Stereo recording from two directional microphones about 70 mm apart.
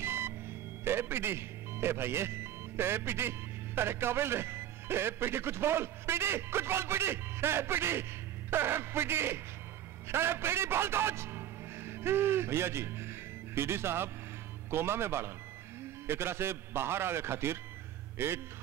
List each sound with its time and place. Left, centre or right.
0.0 s music: right
0.8 s a man's voice: right